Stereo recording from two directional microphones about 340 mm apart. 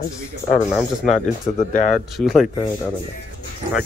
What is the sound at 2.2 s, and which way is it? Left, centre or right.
Speech, centre.